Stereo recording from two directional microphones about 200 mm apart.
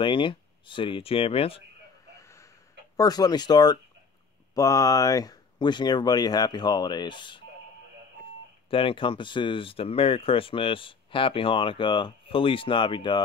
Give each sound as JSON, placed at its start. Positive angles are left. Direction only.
{"t": 0.0, "sound": "speech", "side_deg": 25}
{"t": 2.2, "sound": "a sound", "side_deg": 15}
{"t": 3.0, "sound": "speech", "side_deg": 20}
{"t": 8.6, "sound": "speech", "side_deg": 25}